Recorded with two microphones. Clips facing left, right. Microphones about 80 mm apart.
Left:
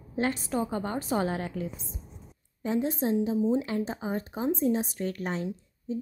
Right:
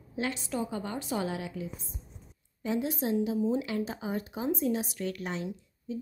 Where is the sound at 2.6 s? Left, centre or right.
Left.